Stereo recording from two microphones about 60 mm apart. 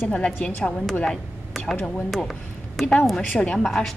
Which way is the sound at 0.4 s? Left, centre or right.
Centre.